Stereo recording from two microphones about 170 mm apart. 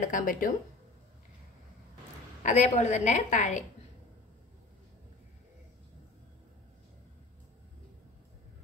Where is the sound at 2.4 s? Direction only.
45° left (ahead or behind).